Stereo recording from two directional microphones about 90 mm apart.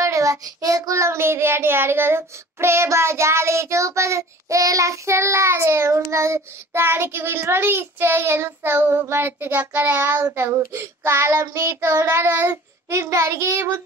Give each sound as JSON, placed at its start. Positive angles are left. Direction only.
{"t": 0.0, "sound": "child singing", "side_deg": -35}